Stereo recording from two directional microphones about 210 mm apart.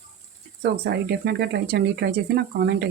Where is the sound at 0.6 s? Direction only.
50° right (ahead or behind).